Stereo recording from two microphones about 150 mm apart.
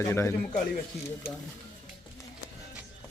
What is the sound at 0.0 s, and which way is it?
Speech, 20° left (ahead or behind).